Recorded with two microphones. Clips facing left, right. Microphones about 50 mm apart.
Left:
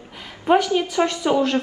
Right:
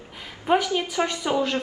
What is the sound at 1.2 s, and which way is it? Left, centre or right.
Speech, left.